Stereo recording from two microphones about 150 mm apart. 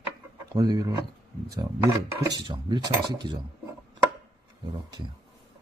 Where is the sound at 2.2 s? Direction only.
30° right (ahead or behind).